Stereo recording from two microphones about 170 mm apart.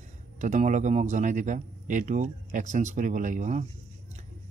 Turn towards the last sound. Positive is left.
turn(degrees=-45)  # may be behind; listen again after turning